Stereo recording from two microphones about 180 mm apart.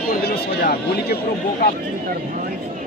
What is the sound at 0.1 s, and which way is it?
Speech, 60° left (ahead or behind).